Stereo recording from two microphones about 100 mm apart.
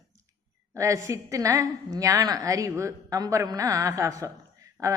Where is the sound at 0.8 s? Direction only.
30° right (ahead or behind).